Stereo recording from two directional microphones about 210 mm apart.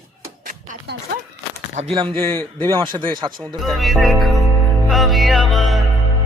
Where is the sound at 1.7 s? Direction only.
30° right (ahead or behind).